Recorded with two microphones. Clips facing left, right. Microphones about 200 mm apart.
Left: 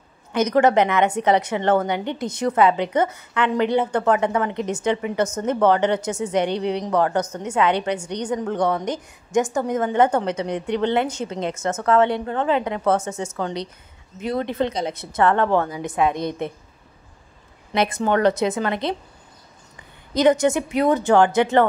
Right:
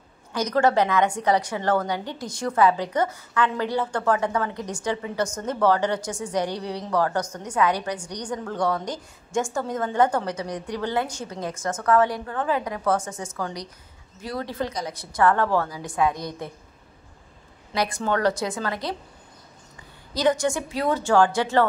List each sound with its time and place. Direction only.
0.3 s a woman's voice: 20° left (ahead or behind)
17.7 s a woman's voice: 20° left (ahead or behind)
20.2 s a woman's voice: 20° left (ahead or behind)